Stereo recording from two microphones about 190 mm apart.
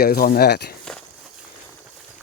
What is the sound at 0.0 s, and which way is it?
Speech, 50° left (ahead or behind).